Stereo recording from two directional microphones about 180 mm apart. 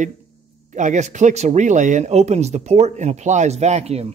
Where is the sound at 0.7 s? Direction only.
40° right (ahead or behind).